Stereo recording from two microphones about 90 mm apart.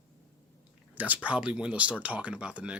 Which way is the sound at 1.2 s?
10° right (ahead or behind).